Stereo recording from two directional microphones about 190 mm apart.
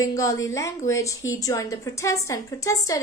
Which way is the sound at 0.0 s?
15° left (ahead or behind).